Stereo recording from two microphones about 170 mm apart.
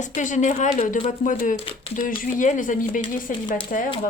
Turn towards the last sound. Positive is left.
turn(degrees=50)  # may be behind; listen again after turning